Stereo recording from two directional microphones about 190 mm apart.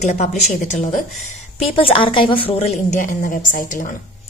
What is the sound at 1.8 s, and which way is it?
A woman's voice, 30° left (ahead or behind).